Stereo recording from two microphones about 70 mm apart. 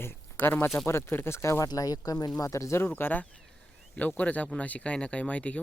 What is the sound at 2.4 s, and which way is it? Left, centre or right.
Speech, left.